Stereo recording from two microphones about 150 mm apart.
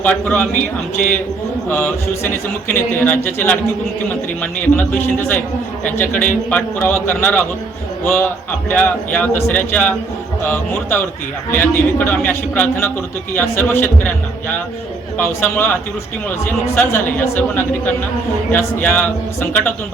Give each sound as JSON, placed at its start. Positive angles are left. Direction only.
{"t": 0.0, "sound": "a man's voice", "side_deg": 10}
{"t": 0.5, "sound": "speech", "side_deg": 60}
{"t": 1.7, "sound": "a man's voice", "side_deg": 15}
{"t": 5.8, "sound": "a man's voice", "side_deg": 15}
{"t": 15.2, "sound": "a man's voice", "side_deg": 15}